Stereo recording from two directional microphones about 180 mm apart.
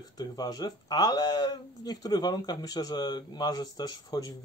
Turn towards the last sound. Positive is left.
turn(degrees=20)  # may be behind; listen again after turning